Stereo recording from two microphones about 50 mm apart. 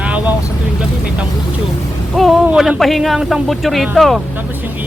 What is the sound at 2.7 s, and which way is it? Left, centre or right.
Speech, centre.